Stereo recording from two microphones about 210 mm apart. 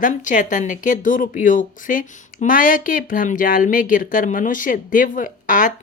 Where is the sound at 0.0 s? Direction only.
35° left (ahead or behind).